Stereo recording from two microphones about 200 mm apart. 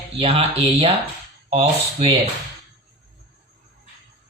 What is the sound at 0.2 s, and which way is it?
Speech, 30° right (ahead or behind).